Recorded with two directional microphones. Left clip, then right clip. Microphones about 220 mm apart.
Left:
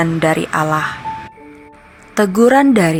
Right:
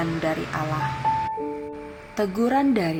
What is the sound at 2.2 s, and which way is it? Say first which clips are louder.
Speech: left 11 dB; 45° left (ahead or behind).